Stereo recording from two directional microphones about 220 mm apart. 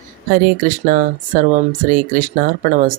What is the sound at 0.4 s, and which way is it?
Speech, 40° right (ahead or behind).